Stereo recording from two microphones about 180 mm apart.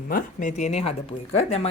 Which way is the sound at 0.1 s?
50° left (ahead or behind).